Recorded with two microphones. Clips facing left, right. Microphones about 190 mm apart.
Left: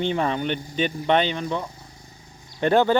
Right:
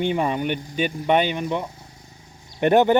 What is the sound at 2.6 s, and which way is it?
Speech, 20° right (ahead or behind).